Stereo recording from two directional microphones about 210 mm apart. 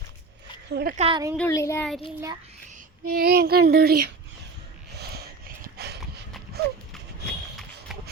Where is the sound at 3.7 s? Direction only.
45° right (ahead or behind).